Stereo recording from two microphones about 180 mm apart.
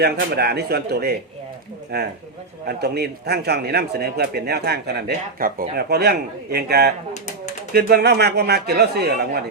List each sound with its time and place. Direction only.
0.0 s a man's voice: 60° right (ahead or behind)